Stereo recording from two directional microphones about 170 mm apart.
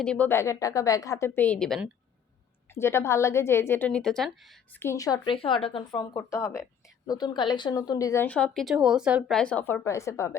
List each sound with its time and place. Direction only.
0.0 s a woman's voice: 10° left (ahead or behind)
2.7 s a woman's voice: 15° left (ahead or behind)
4.8 s speech: 15° left (ahead or behind)
6.1 s a woman's voice: 15° left (ahead or behind); by 9.4 s 5° right (ahead or behind)
9.4 s a woman's voice: 5° left (ahead or behind)